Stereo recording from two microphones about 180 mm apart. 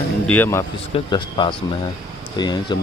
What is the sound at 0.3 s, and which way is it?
Speech, 10° left (ahead or behind).